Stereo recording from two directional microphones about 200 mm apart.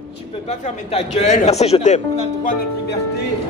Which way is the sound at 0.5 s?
30° left (ahead or behind).